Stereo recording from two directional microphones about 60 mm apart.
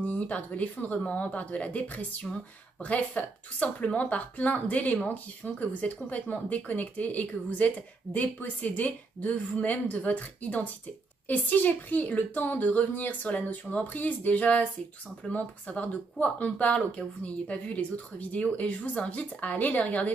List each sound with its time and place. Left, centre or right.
0.0 s a woman's voice: left